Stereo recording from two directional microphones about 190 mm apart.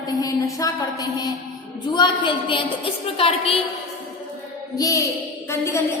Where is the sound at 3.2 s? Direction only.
30° left (ahead or behind).